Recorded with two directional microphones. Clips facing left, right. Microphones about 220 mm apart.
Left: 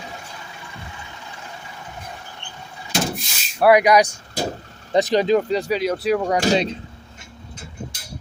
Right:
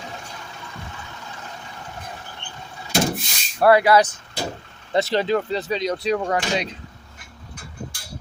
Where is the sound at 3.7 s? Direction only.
15° left (ahead or behind).